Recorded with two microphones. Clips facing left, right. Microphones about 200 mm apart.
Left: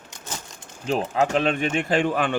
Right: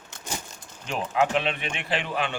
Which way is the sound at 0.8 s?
30° left (ahead or behind).